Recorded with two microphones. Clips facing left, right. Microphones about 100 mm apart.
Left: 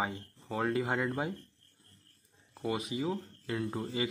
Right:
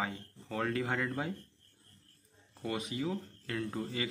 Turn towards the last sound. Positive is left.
turn(degrees=20)  # may be behind; listen again after turning